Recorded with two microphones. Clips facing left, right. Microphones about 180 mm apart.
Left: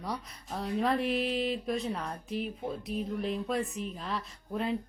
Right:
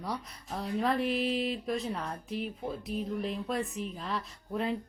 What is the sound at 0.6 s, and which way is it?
Speech, centre (ahead or behind).